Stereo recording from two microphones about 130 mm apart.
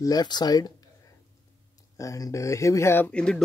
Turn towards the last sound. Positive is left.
turn(degrees=5)  # may be behind; listen again after turning